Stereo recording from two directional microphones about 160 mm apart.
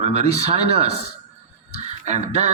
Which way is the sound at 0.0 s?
40° right (ahead or behind).